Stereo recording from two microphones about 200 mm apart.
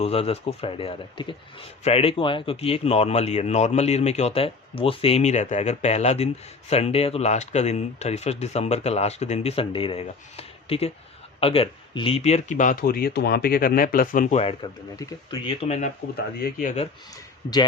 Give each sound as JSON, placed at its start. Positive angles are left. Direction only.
{"t": 0.0, "sound": "speech", "side_deg": 30}
{"t": 16.1, "sound": "speech", "side_deg": 45}